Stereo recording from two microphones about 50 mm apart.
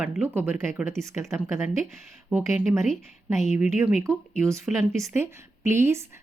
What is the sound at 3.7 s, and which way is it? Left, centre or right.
Speech, right.